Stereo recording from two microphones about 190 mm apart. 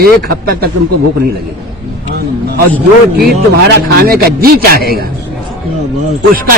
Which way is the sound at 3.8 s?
55° right (ahead or behind).